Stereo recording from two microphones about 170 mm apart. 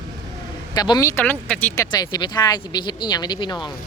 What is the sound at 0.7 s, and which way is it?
Speech, 25° left (ahead or behind).